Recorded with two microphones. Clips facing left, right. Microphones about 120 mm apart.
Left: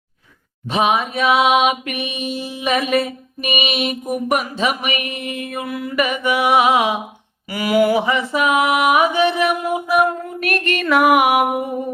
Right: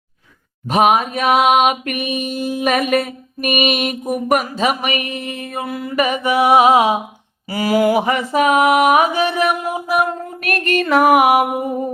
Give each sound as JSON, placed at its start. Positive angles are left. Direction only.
{"t": 0.7, "sound": "a sound", "side_deg": -45}
{"t": 7.5, "sound": "mantra", "side_deg": -35}
{"t": 10.4, "sound": "mantra", "side_deg": -40}